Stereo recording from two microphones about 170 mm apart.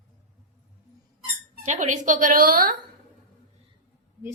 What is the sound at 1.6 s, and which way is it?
A woman's voice, 45° right (ahead or behind).